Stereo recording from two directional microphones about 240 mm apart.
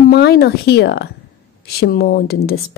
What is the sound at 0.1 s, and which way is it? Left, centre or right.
Speech, left.